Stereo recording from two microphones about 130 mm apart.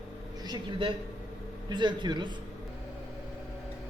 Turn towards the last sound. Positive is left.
turn(degrees=-35)  # may be behind; listen again after turning